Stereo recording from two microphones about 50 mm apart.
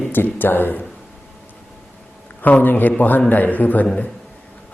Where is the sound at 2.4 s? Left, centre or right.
Left.